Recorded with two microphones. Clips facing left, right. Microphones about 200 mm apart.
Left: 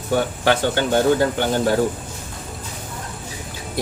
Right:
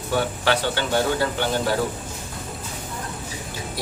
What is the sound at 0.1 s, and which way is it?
Speech, 45° left (ahead or behind).